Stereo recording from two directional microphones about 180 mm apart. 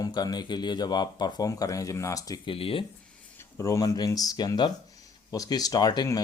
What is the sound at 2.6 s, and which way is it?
Speech, 30° left (ahead or behind).